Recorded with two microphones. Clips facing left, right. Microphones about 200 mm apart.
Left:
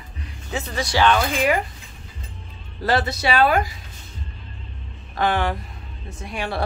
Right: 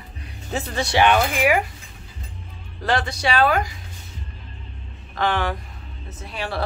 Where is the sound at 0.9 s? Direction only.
15° right (ahead or behind).